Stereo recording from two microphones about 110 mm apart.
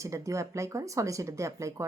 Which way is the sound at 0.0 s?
30° right (ahead or behind).